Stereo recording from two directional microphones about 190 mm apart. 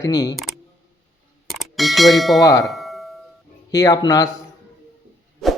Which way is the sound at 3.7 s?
20° left (ahead or behind).